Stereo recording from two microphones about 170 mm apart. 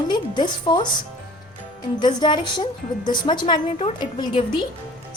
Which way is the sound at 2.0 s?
25° left (ahead or behind).